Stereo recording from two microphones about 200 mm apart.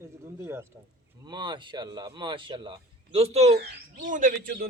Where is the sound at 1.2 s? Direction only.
20° right (ahead or behind); by 4.6 s 45° right (ahead or behind).